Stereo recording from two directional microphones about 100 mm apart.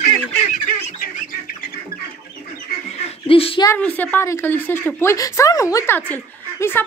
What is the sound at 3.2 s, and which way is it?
Speech, 70° left (ahead or behind).